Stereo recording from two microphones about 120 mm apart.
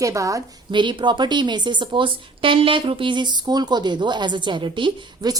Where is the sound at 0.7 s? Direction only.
40° right (ahead or behind).